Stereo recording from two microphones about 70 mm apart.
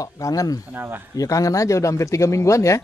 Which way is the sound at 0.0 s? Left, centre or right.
Left.